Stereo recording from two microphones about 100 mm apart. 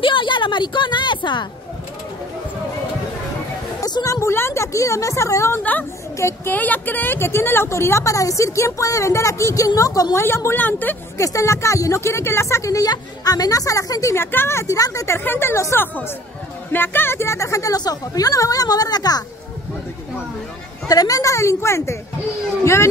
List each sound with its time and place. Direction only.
0.0 s a woman's voice: 55° left (ahead or behind)
3.8 s a woman's voice: 35° left (ahead or behind)
5.6 s a woman's voice: 15° left (ahead or behind)
6.1 s a woman's voice: 30° left (ahead or behind)
6.5 s a woman's voice: 15° left (ahead or behind)
11.1 s speech: 30° left (ahead or behind)
14.1 s a woman's voice: 25° left (ahead or behind); by 19.2 s 40° left (ahead or behind)
20.9 s a woman's voice: 35° left (ahead or behind)